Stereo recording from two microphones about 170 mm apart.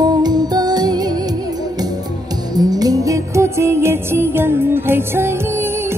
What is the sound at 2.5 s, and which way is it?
Music, 20° right (ahead or behind).